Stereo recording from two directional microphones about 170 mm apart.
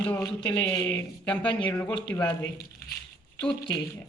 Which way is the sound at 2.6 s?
65° left (ahead or behind).